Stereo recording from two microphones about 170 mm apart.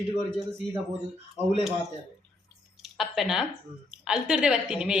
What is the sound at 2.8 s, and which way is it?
A woman's voice, centre (ahead or behind).